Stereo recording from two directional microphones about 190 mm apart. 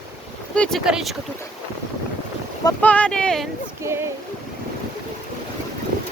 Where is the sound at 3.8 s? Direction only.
15° right (ahead or behind).